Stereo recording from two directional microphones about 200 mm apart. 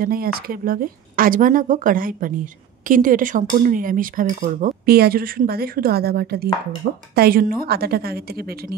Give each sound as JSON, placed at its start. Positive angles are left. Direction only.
{"t": 0.0, "sound": "speech", "side_deg": -50}